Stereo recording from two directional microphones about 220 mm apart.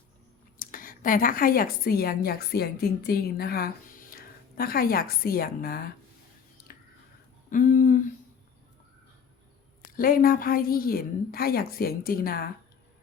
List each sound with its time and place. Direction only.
0.6 s a woman's voice: 40° left (ahead or behind)
7.5 s a sound: 35° left (ahead or behind)
10.0 s a woman's voice: 40° left (ahead or behind)